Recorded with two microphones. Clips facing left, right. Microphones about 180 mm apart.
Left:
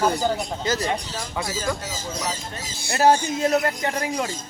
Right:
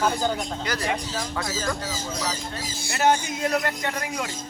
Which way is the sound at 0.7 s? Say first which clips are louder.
Left 8 dB; 25° left (ahead or behind).